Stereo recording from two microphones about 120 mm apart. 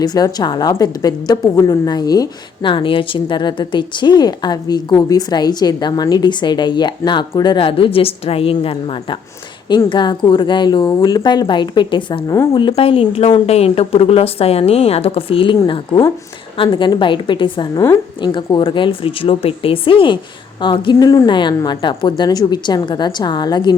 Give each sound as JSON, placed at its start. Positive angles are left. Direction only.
{"t": 0.0, "sound": "a woman's voice", "side_deg": 35}
{"t": 2.6, "sound": "a woman's voice", "side_deg": 45}